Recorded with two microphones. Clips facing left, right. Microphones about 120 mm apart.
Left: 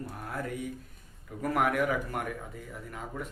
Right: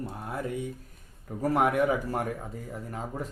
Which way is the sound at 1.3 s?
30° right (ahead or behind).